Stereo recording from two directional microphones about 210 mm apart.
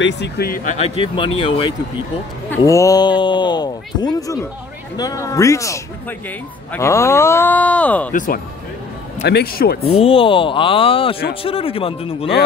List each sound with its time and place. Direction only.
0.0 s speech: 50° left (ahead or behind)
0.7 s speech: 25° left (ahead or behind)
2.5 s speech: 15° left (ahead or behind)
8.1 s speech: 40° left (ahead or behind)
9.2 s speech: 50° left (ahead or behind)
9.9 s speech: 25° left (ahead or behind)